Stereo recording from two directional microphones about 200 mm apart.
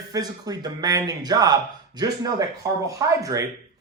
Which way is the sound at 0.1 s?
20° right (ahead or behind).